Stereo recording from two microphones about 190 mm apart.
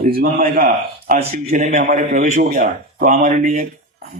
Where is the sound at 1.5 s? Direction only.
35° right (ahead or behind).